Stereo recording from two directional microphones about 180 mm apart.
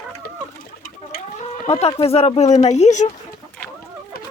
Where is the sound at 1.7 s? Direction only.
30° left (ahead or behind).